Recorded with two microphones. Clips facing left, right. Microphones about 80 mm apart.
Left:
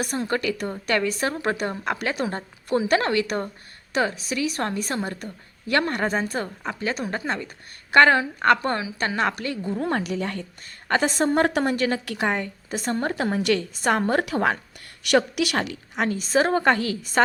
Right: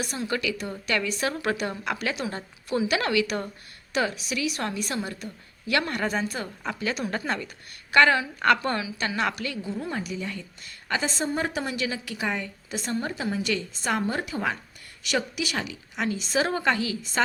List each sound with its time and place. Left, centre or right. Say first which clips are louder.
0.0 s a woman's voice: left 4 dB; left
6.6 s a woman's voice: left 2 dB; left
9.8 s a woman's voice: left 6 dB; left